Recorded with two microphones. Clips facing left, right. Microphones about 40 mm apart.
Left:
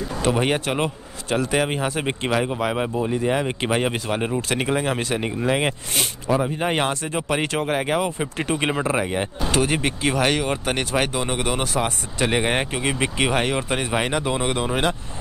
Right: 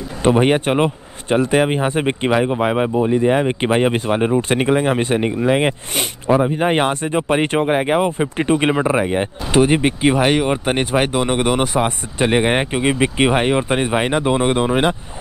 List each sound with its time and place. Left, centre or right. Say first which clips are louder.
0.2 s speech: right 7 dB; right
5.9 s speech: right 6 dB; right